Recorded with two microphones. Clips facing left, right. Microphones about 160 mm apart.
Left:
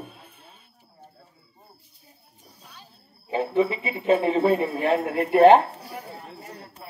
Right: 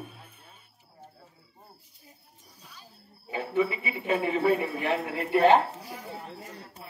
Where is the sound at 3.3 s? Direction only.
25° left (ahead or behind).